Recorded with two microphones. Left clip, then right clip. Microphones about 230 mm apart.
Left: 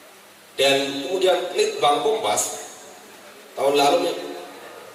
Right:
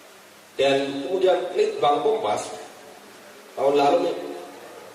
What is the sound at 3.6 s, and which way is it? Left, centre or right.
Speech, centre.